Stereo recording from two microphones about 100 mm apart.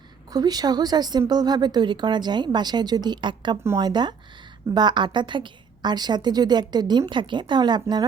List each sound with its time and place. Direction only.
0.3 s speech: 40° right (ahead or behind)